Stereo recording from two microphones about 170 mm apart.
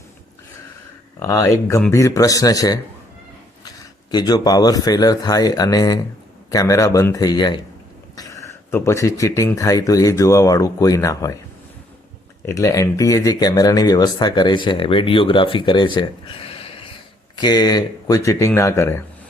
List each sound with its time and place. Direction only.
1.2 s speech: 20° left (ahead or behind)
4.1 s speech: 25° left (ahead or behind)
12.5 s speech: 15° left (ahead or behind)